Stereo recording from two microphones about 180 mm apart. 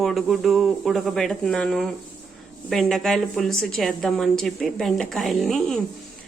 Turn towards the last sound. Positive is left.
turn(degrees=5)  # may be behind; listen again after turning